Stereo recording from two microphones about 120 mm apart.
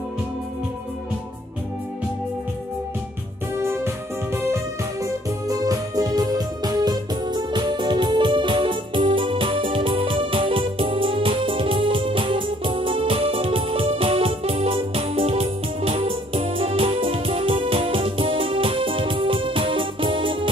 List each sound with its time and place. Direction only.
3.5 s keyboard: 20° right (ahead or behind); by 20.4 s 45° right (ahead or behind)